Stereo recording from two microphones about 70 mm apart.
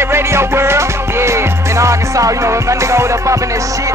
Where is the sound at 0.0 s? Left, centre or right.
Right.